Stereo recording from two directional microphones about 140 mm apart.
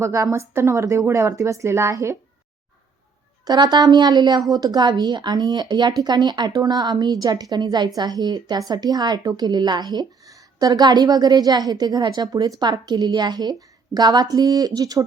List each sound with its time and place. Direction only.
0.0 s a woman's voice: 20° right (ahead or behind)
3.4 s a woman's voice: 30° right (ahead or behind)